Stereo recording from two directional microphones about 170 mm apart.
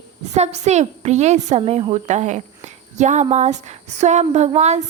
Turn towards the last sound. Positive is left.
turn(degrees=-40)  # may be behind; listen again after turning